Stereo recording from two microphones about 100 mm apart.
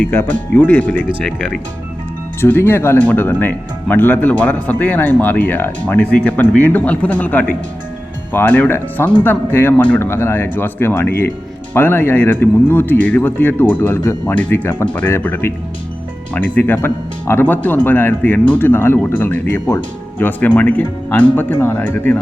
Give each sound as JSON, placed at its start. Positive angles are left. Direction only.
{"t": 0.0, "sound": "speech", "side_deg": 20}
{"t": 2.4, "sound": "speech", "side_deg": 25}